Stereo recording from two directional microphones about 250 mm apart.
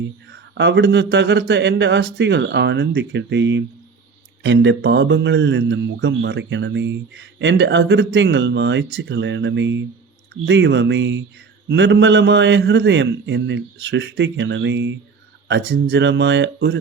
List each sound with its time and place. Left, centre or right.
0.0 s speech: right